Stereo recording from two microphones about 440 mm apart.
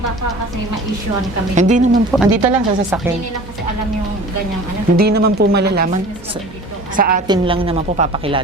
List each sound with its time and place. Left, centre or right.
1.5 s a woman's voice: centre
2.1 s speech: centre
4.9 s speech: right
6.9 s a woman's voice: centre